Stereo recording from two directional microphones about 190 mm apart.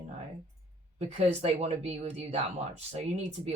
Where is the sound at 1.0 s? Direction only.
35° right (ahead or behind).